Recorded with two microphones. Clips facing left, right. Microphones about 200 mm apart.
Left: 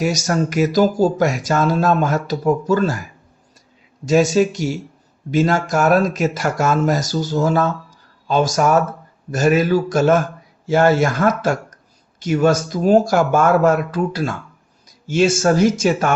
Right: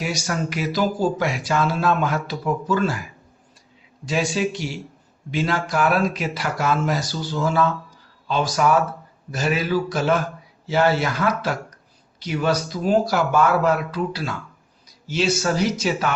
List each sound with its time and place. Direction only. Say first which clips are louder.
0.0 s speech: left 7 dB; 45° left (ahead or behind)
4.0 s speech: left 8 dB; 45° left (ahead or behind)